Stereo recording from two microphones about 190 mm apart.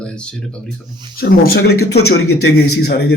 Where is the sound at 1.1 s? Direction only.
50° left (ahead or behind).